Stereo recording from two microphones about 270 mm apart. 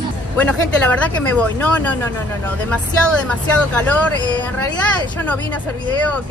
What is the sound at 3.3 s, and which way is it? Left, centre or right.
Speech, centre.